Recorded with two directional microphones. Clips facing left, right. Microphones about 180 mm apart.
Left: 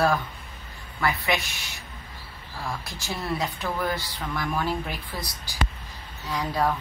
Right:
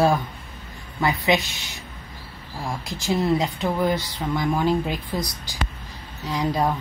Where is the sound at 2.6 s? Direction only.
20° right (ahead or behind).